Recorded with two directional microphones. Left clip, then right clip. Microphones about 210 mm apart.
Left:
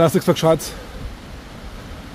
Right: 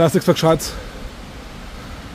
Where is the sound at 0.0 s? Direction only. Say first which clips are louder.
Right 1 dB; centre (ahead or behind).